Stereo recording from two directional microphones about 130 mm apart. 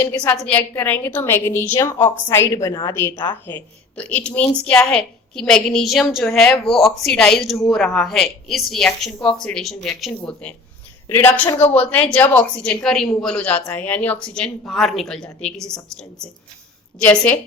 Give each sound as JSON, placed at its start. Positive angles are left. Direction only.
{"t": 0.0, "sound": "a woman's voice", "side_deg": 15}
{"t": 3.4, "sound": "a woman's voice", "side_deg": 15}
{"t": 17.0, "sound": "speech", "side_deg": 10}